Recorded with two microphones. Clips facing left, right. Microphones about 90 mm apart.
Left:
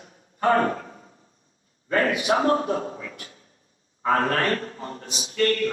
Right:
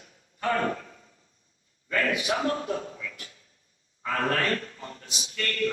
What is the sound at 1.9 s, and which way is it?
A man's voice, 35° left (ahead or behind).